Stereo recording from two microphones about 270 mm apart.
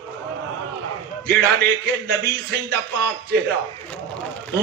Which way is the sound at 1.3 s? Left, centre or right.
Right.